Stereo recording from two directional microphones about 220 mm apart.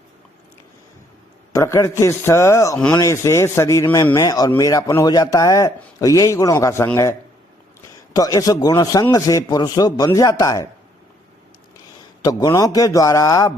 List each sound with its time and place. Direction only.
1.5 s a man's voice: 15° left (ahead or behind)
12.2 s a man's voice: 15° left (ahead or behind)